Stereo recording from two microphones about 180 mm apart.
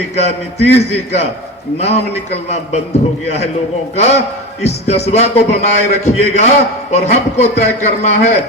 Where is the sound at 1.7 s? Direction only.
35° left (ahead or behind).